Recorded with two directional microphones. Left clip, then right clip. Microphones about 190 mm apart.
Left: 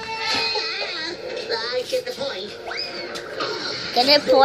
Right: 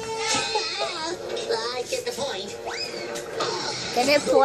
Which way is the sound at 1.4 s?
20° left (ahead or behind).